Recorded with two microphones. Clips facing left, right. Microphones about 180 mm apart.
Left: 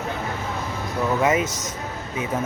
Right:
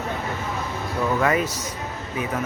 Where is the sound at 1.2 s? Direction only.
20° left (ahead or behind).